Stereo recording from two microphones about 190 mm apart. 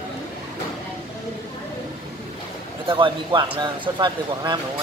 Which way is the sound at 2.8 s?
25° right (ahead or behind).